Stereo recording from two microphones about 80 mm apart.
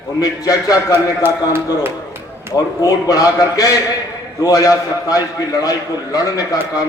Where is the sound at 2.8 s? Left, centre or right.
Left.